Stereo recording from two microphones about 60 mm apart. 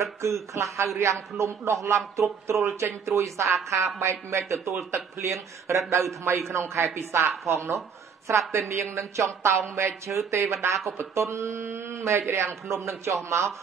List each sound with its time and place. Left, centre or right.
0.0 s a man's voice: right